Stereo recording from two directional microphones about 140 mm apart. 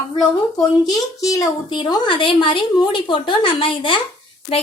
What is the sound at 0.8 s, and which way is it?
A woman's voice, 25° left (ahead or behind).